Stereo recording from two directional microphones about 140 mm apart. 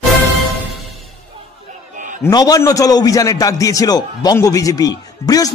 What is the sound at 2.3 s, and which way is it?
A man's voice, 25° left (ahead or behind).